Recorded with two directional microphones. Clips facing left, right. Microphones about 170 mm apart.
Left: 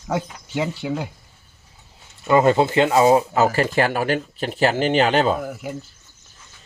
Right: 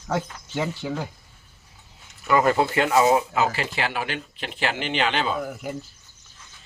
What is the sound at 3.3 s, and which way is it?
Speech, 45° left (ahead or behind).